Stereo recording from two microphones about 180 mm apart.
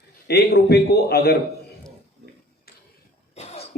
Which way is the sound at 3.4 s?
35° left (ahead or behind).